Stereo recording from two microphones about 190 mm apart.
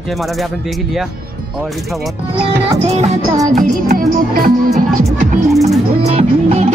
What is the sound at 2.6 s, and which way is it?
Music, 30° right (ahead or behind).